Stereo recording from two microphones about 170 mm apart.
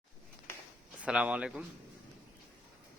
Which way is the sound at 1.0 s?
5° right (ahead or behind).